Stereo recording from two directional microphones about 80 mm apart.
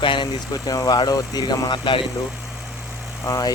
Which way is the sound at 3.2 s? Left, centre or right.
Left.